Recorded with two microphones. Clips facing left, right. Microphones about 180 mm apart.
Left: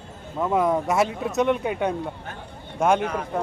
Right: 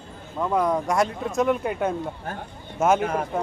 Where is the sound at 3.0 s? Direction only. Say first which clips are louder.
Right 2 dB; 50° right (ahead or behind).